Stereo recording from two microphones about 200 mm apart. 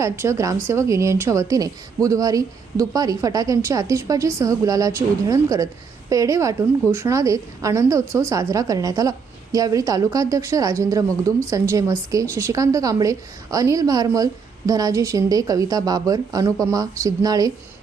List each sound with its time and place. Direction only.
0.0 s a woman's voice: 15° right (ahead or behind)